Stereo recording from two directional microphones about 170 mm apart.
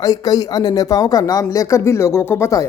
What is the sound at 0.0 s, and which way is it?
Speech, 20° left (ahead or behind).